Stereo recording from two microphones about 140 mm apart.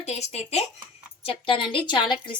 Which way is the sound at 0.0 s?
50° left (ahead or behind).